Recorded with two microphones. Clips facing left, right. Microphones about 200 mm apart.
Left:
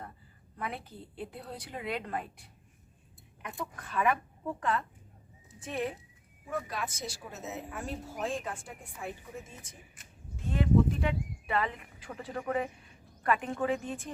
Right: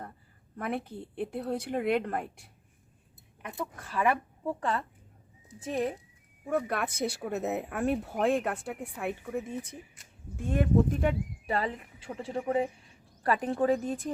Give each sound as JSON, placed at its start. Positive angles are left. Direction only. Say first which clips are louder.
{"t": 0.5, "sound": "a woman's voice", "louder": "right 6 dB", "side_deg": -50}
{"t": 3.8, "sound": "speech", "louder": "right 1 dB", "side_deg": -30}
{"t": 6.4, "sound": "speech", "louder": "right 6 dB", "side_deg": -60}